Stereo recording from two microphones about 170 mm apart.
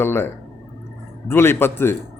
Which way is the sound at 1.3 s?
15° left (ahead or behind).